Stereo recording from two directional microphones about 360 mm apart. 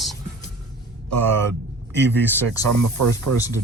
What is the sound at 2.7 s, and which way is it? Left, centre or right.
Speech, right.